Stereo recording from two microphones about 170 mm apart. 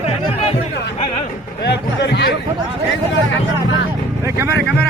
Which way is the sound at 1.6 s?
85° left.